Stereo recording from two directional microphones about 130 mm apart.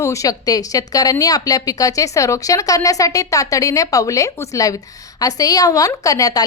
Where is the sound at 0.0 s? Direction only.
25° left (ahead or behind).